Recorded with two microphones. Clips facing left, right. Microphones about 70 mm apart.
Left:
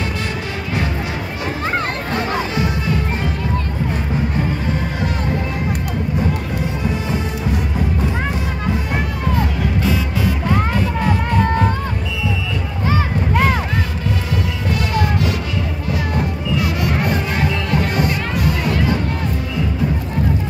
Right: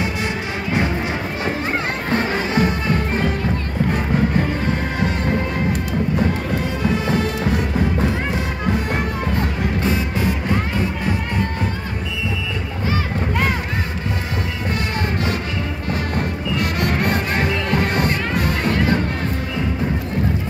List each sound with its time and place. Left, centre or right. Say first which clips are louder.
2.5 s music: right 2 dB; right
9.8 s music: left 1 dB; right
14.7 s music: left 4 dB; right
15.9 s music: left 2 dB; right